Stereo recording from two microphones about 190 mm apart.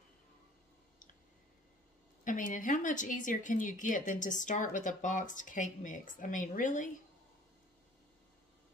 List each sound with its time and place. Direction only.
2.2 s speech: 45° left (ahead or behind)